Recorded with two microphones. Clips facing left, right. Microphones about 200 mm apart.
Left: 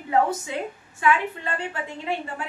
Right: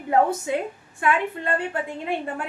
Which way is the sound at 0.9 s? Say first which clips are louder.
Even; 55° right (ahead or behind).